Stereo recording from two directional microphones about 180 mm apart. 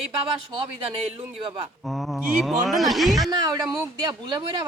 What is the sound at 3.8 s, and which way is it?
Speech, 25° right (ahead or behind).